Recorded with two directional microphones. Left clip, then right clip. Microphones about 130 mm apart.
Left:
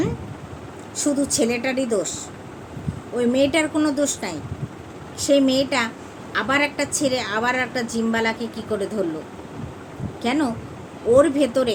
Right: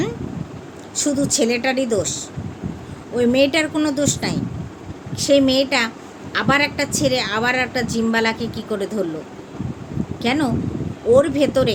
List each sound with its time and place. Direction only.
0.9 s a woman's voice: 15° right (ahead or behind)
10.2 s a woman's voice: 20° right (ahead or behind)